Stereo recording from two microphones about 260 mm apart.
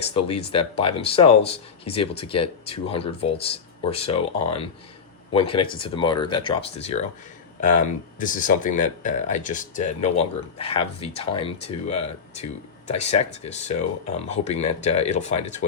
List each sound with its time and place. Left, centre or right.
0.1 s speech: left